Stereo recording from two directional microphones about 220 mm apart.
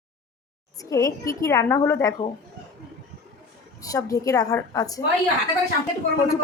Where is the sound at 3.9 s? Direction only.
15° left (ahead or behind).